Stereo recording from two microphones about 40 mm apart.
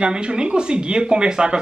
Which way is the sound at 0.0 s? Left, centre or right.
Right.